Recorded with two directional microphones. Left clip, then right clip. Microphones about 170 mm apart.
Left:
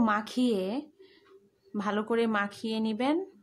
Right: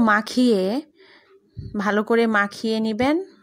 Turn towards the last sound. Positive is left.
turn(degrees=-35)  # may be behind; listen again after turning